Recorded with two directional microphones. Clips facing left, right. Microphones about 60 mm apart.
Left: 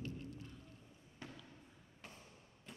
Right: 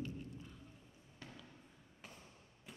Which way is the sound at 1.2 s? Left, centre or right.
Left.